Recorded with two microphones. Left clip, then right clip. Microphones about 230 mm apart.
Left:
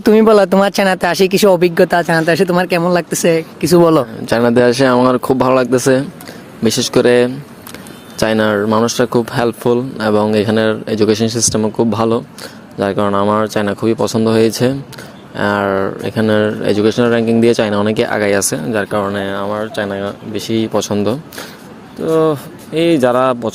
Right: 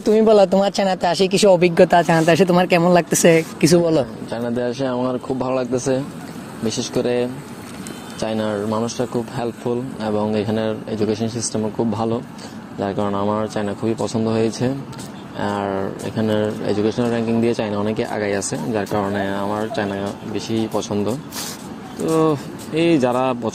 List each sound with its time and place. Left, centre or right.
0.0 s speech: left; by 3.8 s centre
4.3 s speech: left
22.0 s speech: left